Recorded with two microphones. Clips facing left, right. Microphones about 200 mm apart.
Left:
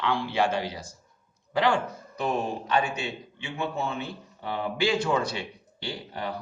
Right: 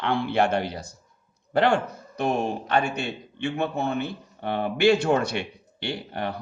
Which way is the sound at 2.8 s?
55° right (ahead or behind).